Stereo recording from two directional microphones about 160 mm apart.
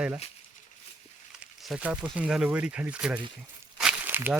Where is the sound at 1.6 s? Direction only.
5° right (ahead or behind).